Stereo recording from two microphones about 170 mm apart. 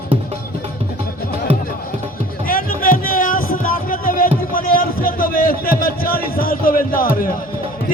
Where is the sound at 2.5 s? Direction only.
55° left (ahead or behind).